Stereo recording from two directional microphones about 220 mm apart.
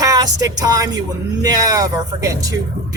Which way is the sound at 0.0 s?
15° right (ahead or behind).